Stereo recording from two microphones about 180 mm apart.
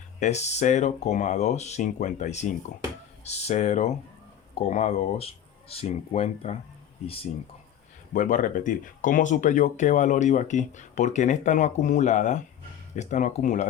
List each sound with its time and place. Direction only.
0.2 s speech: 40° left (ahead or behind)
8.1 s speech: 45° left (ahead or behind)